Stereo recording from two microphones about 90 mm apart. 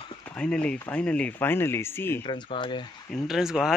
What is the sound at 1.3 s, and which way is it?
Speech, 25° left (ahead or behind).